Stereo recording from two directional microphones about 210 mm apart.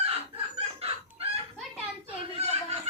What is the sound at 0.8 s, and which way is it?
Chicken, 30° right (ahead or behind).